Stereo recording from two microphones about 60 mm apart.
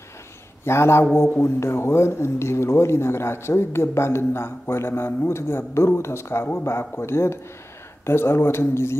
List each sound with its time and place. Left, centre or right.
0.7 s speech: left